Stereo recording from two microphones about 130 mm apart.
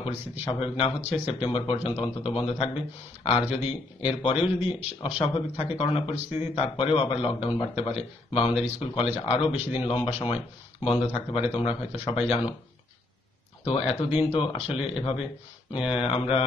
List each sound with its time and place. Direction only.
0.0 s a man's voice: 45° left (ahead or behind)
13.7 s speech: 45° left (ahead or behind)